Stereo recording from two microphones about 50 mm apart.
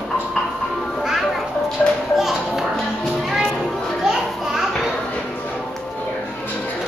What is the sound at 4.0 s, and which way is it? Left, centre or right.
Children playing, centre.